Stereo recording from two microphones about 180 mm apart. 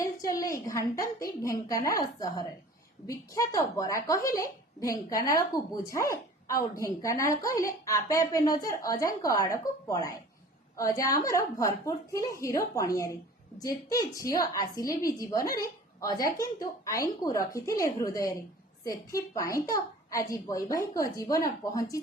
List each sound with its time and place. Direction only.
0.0 s a woman's voice: 20° left (ahead or behind)